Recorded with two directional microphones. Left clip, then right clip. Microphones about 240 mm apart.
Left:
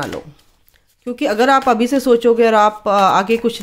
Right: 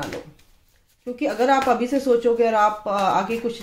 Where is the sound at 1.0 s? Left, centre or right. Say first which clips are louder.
Left 6 dB; left.